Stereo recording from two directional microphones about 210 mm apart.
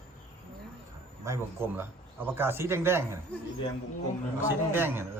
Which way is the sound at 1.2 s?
10° right (ahead or behind).